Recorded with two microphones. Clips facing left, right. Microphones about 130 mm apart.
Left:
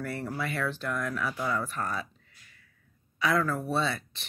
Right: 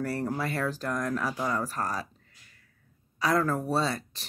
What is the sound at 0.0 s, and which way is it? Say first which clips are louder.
Speech: right 3 dB; 35° right (ahead or behind).